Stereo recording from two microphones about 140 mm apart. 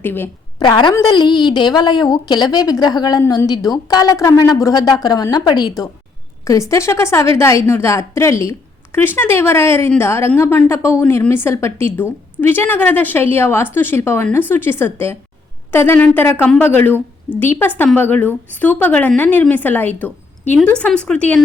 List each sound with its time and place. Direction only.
0.0 s a woman's voice: 15° left (ahead or behind)
0.6 s a woman's voice: 35° left (ahead or behind); by 21.4 s 10° left (ahead or behind)